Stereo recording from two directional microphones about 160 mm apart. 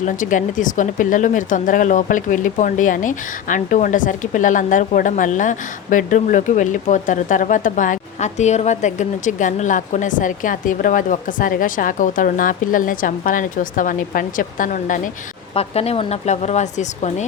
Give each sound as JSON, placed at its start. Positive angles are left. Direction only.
{"t": 0.0, "sound": "speech", "side_deg": 55}
{"t": 15.5, "sound": "speech", "side_deg": 40}